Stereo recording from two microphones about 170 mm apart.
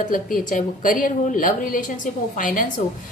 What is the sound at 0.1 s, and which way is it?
A woman's voice, 55° left (ahead or behind).